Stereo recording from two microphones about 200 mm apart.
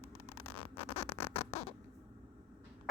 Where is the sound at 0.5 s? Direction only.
25° left (ahead or behind).